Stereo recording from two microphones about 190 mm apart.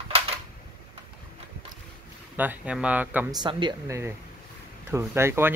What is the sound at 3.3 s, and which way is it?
A man's voice, 25° right (ahead or behind).